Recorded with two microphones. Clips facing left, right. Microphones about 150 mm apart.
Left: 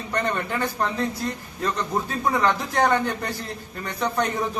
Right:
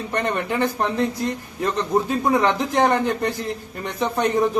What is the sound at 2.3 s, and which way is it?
A man's voice, 15° right (ahead or behind).